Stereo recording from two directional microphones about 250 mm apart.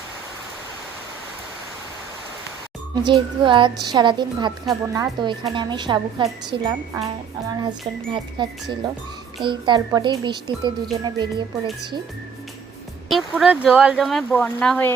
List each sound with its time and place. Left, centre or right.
3.1 s a woman's voice: centre
13.1 s speech: centre